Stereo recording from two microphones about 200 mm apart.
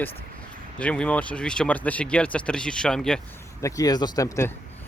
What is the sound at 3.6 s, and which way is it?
Speech, 15° left (ahead or behind).